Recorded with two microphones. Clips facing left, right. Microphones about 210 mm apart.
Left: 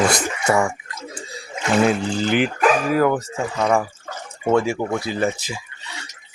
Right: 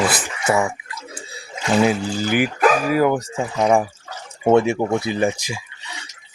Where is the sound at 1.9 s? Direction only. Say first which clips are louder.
Left 1 dB; 5° right (ahead or behind).